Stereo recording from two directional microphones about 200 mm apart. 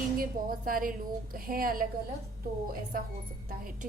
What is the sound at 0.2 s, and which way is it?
A woman's voice, 45° right (ahead or behind).